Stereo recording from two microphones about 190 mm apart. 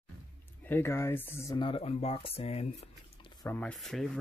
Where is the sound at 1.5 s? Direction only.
25° left (ahead or behind).